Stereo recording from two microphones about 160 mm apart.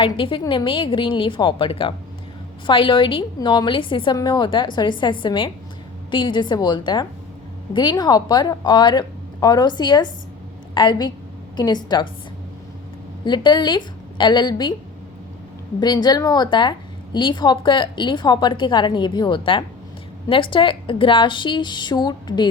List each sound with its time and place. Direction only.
0.0 s a woman's voice: 35° left (ahead or behind)
13.2 s a woman's voice: 30° left (ahead or behind)
15.8 s a woman's voice: 25° left (ahead or behind)